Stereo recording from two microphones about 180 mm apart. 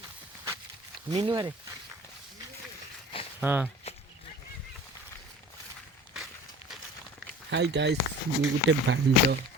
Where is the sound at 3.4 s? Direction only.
10° right (ahead or behind).